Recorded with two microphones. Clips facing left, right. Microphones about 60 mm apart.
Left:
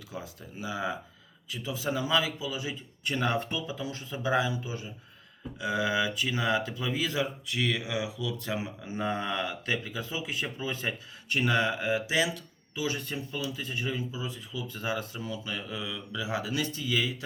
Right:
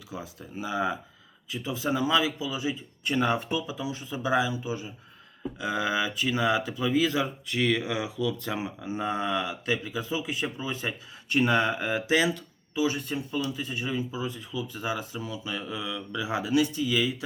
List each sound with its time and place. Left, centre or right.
0.1 s speech: right
5.4 s speech: right
7.0 s speech: right
16.1 s speech: right